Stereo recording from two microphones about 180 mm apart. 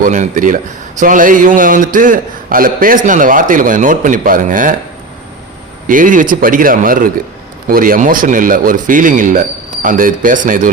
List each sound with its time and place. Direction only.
0.0 s speech: 45° right (ahead or behind)
5.9 s speech: 45° right (ahead or behind)